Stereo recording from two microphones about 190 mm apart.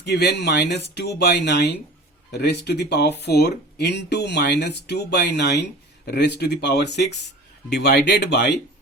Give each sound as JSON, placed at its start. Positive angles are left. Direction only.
{"t": 0.0, "sound": "speech", "side_deg": 60}